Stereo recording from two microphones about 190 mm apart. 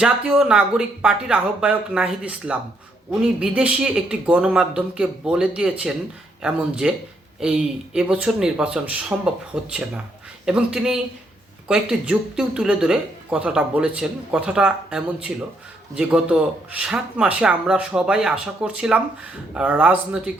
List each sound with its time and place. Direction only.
0.0 s speech: 5° right (ahead or behind)